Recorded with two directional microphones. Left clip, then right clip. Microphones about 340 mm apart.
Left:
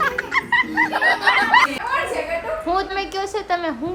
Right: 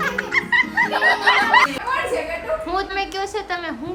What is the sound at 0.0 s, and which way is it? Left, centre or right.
Snicker, centre.